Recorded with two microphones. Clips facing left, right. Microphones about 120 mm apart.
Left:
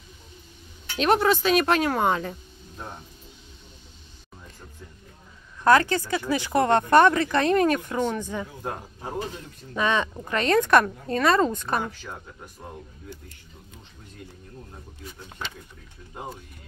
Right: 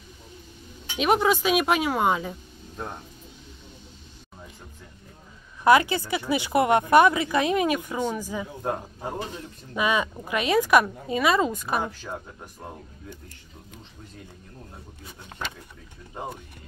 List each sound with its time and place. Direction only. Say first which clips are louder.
0.8 s a woman's voice: left 1 dB; 10° right (ahead or behind)
5.6 s a woman's voice: even; 15° right (ahead or behind)
9.8 s a woman's voice: even; 10° right (ahead or behind)